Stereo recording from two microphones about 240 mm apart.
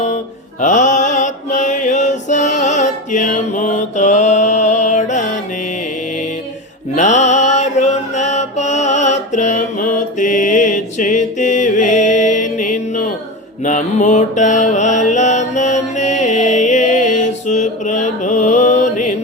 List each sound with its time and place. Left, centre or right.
0.6 s mantra: left
6.9 s mantra: left